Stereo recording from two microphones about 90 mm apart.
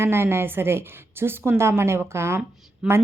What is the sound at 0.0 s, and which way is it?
A woman's voice, 30° right (ahead or behind).